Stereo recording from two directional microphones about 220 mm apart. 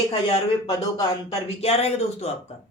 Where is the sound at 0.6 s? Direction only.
15° left (ahead or behind).